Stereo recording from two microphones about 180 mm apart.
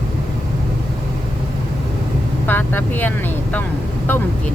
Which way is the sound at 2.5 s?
10° left (ahead or behind).